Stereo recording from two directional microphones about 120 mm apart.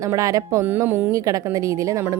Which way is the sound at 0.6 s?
15° right (ahead or behind).